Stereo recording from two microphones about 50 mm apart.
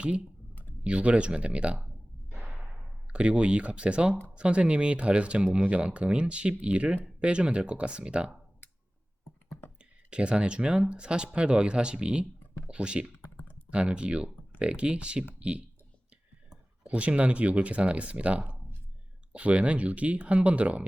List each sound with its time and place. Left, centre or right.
0.0 s speech: right
3.1 s speech: right
10.1 s speech: right